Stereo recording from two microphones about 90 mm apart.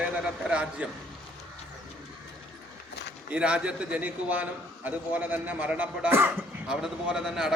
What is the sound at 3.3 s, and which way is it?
A man's voice, 10° right (ahead or behind).